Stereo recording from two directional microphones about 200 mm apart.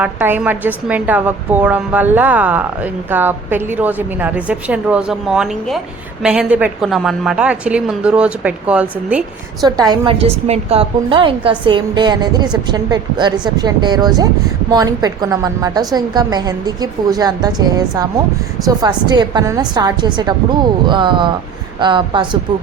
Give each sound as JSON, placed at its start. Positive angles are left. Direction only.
{"t": 0.0, "sound": "a woman's voice", "side_deg": -10}
{"t": 9.6, "sound": "a woman's voice", "side_deg": -20}